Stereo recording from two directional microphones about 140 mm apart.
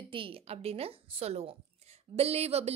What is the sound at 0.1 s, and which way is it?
Speech, 40° right (ahead or behind).